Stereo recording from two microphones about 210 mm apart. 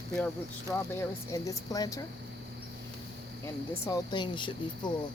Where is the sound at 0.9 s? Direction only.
15° left (ahead or behind).